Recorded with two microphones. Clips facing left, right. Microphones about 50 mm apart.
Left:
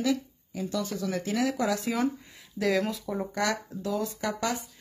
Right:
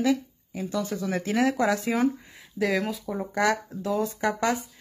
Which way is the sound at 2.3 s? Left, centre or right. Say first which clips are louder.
Right 1 dB; centre.